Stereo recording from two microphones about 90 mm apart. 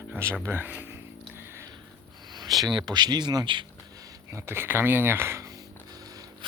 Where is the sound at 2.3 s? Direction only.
50° right (ahead or behind).